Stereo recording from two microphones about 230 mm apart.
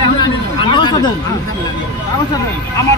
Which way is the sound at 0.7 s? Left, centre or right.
Centre.